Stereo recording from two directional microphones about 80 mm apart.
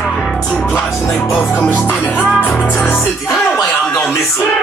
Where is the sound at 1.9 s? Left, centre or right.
Centre.